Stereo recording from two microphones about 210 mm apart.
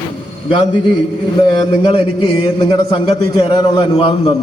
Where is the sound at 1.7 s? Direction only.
25° left (ahead or behind).